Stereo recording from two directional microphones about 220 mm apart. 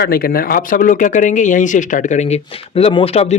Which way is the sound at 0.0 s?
45° left (ahead or behind).